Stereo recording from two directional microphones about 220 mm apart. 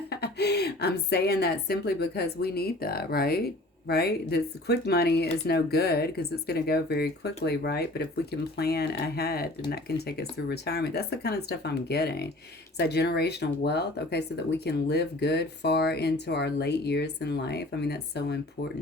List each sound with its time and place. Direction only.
0.1 s speech: 50° left (ahead or behind)